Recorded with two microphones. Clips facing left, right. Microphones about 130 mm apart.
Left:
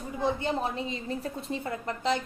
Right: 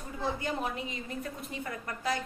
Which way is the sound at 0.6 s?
30° left (ahead or behind).